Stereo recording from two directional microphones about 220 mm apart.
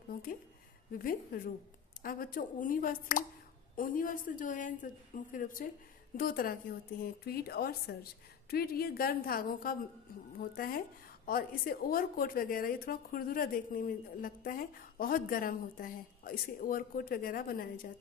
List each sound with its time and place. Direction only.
0.1 s a woman's voice: 40° left (ahead or behind)